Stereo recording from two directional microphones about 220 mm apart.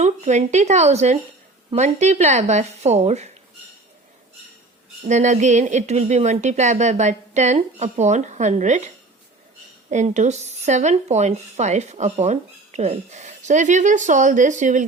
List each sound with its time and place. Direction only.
0.0 s speech: 30° right (ahead or behind)
5.0 s speech: 30° right (ahead or behind)
9.9 s speech: 30° right (ahead or behind)